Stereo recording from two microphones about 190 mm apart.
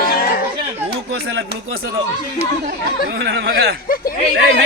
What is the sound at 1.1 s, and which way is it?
Speech, 70° right (ahead or behind).